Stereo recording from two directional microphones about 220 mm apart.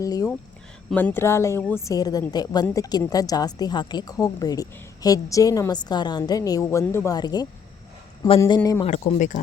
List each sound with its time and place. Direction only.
0.0 s a woman's voice: 15° left (ahead or behind)
8.9 s speech: 35° left (ahead or behind)